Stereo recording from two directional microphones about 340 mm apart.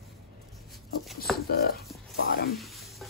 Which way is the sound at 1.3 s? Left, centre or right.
Centre.